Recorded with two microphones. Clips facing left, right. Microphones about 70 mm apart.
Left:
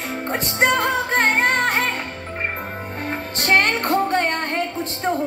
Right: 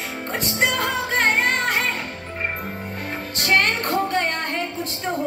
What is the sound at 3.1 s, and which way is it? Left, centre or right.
Music, left.